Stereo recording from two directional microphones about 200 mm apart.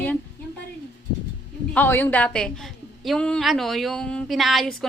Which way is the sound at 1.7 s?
10° left (ahead or behind).